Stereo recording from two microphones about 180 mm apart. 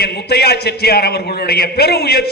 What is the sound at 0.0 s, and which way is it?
A man's voice, 60° left (ahead or behind).